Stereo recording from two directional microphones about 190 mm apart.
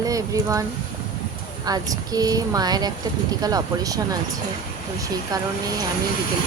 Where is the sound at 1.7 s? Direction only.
20° right (ahead or behind).